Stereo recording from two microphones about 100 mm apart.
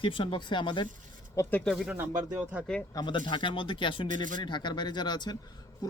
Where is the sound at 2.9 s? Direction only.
50° left (ahead or behind).